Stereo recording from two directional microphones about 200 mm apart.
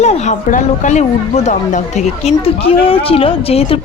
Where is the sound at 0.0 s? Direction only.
35° left (ahead or behind).